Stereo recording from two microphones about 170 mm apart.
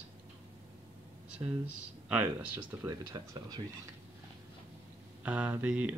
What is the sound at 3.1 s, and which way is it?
Speech, 20° right (ahead or behind).